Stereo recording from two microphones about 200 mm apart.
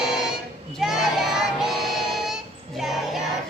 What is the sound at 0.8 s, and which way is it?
Child singing, centre (ahead or behind).